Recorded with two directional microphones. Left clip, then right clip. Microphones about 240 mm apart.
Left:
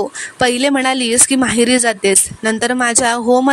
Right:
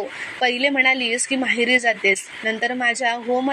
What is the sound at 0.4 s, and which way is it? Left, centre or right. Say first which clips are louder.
Speech: left 4 dB; left.